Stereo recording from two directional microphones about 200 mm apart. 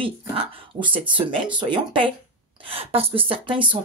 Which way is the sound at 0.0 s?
25° right (ahead or behind).